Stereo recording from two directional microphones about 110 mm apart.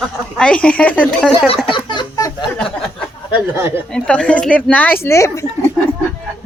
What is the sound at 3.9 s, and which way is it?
A woman's voice, 10° left (ahead or behind).